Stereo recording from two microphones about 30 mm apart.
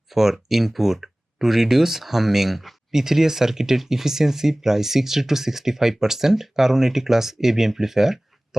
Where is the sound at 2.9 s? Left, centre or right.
Centre.